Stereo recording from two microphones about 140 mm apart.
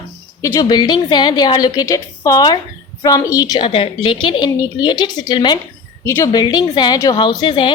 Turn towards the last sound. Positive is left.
turn(degrees=35)  # may be behind; listen again after turning